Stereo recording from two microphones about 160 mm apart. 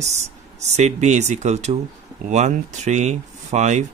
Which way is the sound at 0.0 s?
45° right (ahead or behind).